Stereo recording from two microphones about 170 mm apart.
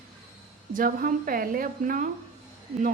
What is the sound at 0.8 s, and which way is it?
A woman's voice, 55° right (ahead or behind).